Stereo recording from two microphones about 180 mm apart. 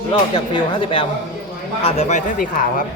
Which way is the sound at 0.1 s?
30° left (ahead or behind).